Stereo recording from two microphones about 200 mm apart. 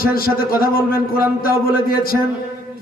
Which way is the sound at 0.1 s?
45° left (ahead or behind).